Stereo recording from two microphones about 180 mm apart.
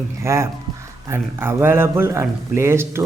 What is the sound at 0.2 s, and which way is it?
Speech, 15° right (ahead or behind).